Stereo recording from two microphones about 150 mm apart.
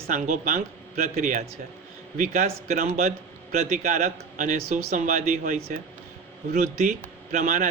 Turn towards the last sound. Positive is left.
turn(degrees=-55)  # may be behind; listen again after turning